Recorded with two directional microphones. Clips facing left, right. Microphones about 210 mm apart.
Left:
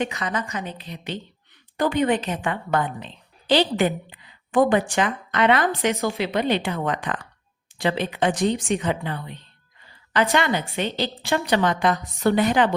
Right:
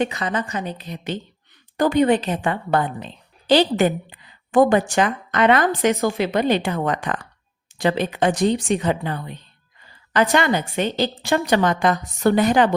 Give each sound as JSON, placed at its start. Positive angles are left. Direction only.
{"t": 0.0, "sound": "a woman's voice", "side_deg": -35}